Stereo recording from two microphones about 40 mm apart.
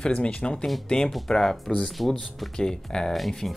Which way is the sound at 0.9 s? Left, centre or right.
Centre.